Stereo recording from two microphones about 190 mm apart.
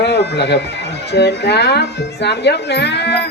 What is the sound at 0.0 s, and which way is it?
Bagpipes, 60° left (ahead or behind).